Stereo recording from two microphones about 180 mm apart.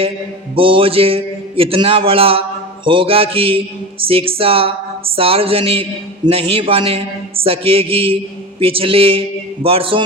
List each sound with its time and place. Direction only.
0.5 s a man's voice: 30° right (ahead or behind)